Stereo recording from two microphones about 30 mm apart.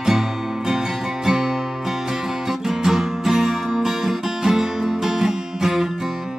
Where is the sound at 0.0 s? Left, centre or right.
Centre.